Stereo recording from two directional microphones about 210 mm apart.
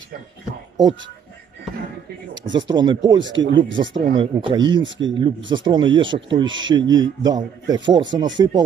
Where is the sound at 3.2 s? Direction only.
60° right (ahead or behind).